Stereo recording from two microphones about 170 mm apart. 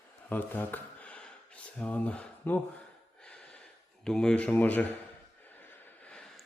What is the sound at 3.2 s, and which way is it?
Gasp, 5° left (ahead or behind).